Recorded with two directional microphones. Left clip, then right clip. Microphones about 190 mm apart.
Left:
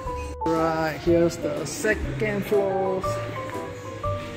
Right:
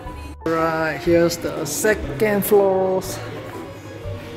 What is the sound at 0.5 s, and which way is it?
Speech, 10° left (ahead or behind).